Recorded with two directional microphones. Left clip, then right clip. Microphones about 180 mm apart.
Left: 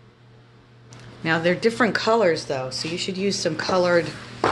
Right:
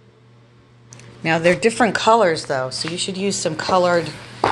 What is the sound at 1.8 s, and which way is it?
Speech, 10° right (ahead or behind).